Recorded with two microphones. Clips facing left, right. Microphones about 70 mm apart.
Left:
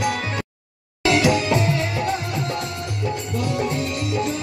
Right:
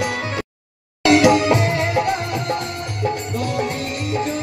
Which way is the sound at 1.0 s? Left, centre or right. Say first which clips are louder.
Right 5 dB; right.